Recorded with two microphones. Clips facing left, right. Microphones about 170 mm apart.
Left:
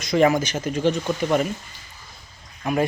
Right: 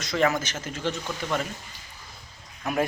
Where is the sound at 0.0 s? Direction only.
15° left (ahead or behind).